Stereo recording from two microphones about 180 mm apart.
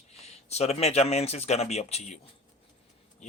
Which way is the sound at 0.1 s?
35° left (ahead or behind).